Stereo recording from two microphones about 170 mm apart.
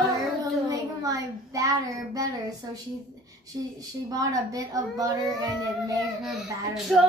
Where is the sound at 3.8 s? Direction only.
20° right (ahead or behind).